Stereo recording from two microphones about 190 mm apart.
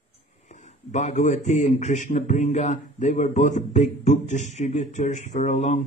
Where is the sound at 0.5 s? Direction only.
40° left (ahead or behind).